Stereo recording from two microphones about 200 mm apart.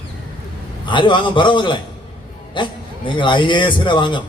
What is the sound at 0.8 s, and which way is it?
A man's voice, 25° left (ahead or behind).